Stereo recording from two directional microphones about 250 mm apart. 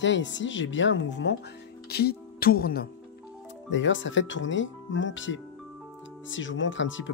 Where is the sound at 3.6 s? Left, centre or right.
Left.